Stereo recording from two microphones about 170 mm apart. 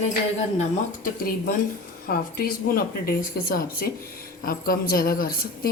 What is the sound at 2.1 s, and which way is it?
Speech, 60° left (ahead or behind).